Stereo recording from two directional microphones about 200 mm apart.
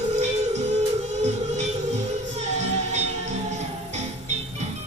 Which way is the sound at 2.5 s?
35° right (ahead or behind).